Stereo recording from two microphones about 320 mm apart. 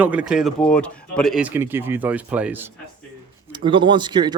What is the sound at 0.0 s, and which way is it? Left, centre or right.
Speech, centre.